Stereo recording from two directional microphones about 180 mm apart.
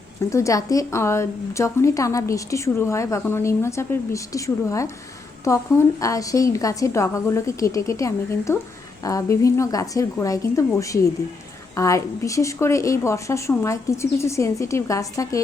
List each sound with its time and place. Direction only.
0.3 s a woman's voice: 15° left (ahead or behind)